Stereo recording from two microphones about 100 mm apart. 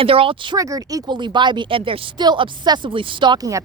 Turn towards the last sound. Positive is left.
turn(degrees=-50)  # may be behind; listen again after turning